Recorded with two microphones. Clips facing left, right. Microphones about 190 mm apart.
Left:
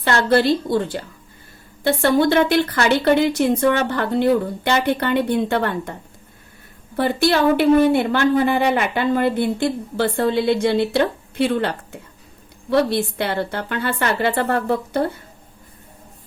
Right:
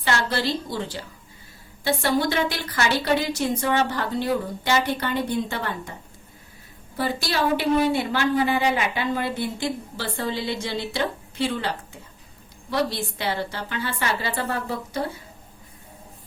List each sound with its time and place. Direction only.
0.0 s speech: 55° left (ahead or behind)